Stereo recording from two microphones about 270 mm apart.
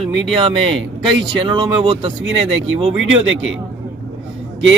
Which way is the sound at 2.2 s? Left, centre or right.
Right.